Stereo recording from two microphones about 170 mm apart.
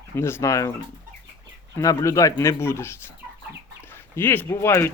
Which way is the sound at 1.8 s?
20° left (ahead or behind).